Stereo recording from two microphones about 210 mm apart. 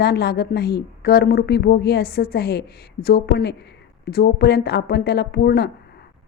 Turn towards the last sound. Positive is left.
turn(degrees=50)  # may be behind; listen again after turning